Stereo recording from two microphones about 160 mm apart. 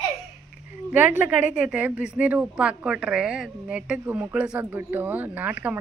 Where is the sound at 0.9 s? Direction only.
10° right (ahead or behind).